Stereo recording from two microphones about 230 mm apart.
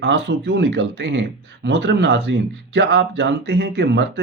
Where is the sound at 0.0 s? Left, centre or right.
Right.